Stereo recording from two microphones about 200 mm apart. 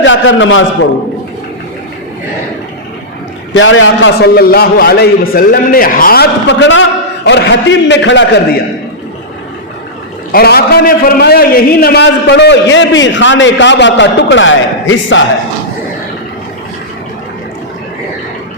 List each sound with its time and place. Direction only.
0.0 s a man's voice: 70° left (ahead or behind)
3.5 s a man's voice: 75° left (ahead or behind)
10.3 s a man's voice: 50° left (ahead or behind); by 15.2 s 70° left (ahead or behind)